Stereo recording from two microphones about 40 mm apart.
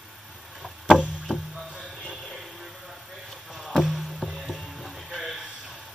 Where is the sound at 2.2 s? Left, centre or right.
Centre.